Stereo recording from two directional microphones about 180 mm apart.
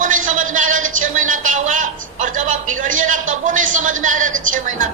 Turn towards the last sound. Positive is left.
turn(degrees=-45)  # may be behind; listen again after turning